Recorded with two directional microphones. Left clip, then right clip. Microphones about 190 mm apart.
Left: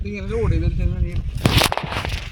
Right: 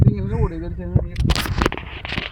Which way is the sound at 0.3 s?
15° right (ahead or behind).